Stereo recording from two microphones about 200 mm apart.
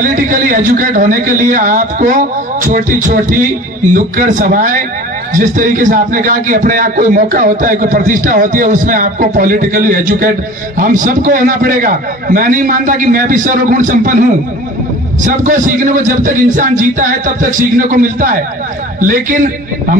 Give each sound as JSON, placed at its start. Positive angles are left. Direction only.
{"t": 0.0, "sound": "a man's voice", "side_deg": -45}
{"t": 15.2, "sound": "a man's voice", "side_deg": -40}